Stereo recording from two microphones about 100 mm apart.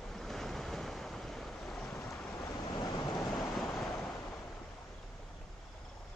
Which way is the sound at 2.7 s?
45° left (ahead or behind).